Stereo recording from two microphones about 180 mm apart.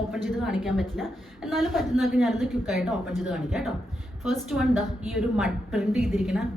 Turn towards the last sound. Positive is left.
turn(degrees=0)  # may be behind; listen again after turning